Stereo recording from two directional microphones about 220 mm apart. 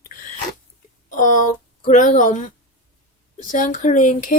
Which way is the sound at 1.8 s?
35° left (ahead or behind).